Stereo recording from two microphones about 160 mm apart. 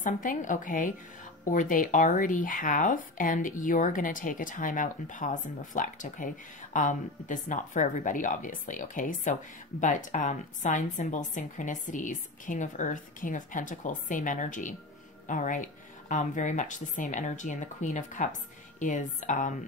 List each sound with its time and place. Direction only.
0.0 s a woman's voice: 55° left (ahead or behind)